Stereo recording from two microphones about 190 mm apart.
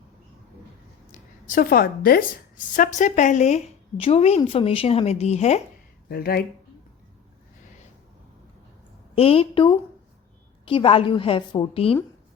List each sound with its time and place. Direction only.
1.1 s a woman's voice: 45° left (ahead or behind)
6.1 s speech: 55° left (ahead or behind)
9.1 s a woman's voice: 30° left (ahead or behind)